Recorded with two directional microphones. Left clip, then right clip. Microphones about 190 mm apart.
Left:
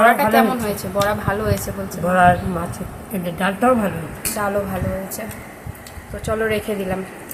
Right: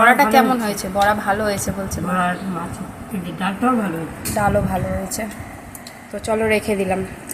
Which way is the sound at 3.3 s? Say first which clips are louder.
Left 3 dB; 60° left (ahead or behind).